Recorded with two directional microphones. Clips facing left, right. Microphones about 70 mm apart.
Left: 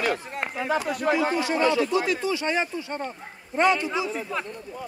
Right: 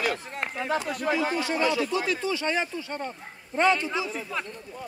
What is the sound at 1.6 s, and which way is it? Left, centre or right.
Speech, left.